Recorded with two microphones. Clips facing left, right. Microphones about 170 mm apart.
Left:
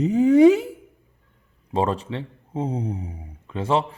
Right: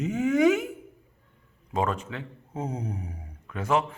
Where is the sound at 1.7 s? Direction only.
30° left (ahead or behind).